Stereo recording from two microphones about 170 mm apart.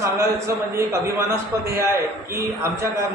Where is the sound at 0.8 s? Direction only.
15° right (ahead or behind).